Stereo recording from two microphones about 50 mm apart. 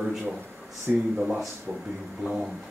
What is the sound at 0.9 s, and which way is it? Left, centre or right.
Speech, right.